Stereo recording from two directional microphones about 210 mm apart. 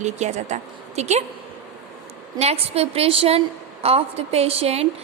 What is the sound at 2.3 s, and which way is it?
A woman's voice, 30° right (ahead or behind).